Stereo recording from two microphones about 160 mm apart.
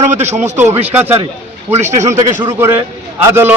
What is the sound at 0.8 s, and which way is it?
A man's voice, 10° right (ahead or behind).